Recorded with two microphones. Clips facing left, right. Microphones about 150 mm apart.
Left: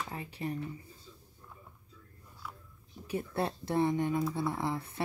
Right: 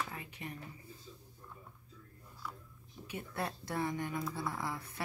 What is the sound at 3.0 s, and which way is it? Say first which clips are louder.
Speech: left 6 dB; 35° left (ahead or behind).